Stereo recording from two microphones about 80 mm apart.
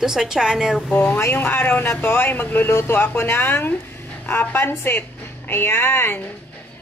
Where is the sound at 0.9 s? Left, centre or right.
Left.